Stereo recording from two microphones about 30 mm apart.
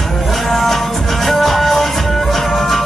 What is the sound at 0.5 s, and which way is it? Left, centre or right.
Music, centre.